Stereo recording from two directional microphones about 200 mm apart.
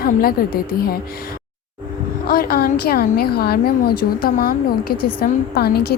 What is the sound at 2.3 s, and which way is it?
A woman's voice, 50° left (ahead or behind).